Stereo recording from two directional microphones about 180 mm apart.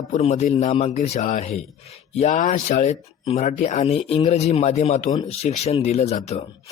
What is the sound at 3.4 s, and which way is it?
Speech, 45° left (ahead or behind).